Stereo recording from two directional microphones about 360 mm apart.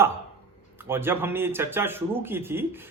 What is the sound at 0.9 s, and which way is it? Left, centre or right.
Speech, centre.